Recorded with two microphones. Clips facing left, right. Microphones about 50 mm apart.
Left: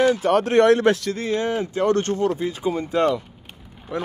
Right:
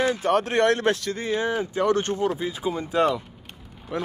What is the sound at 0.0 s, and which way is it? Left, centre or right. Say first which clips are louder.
Speech: left 4 dB; left.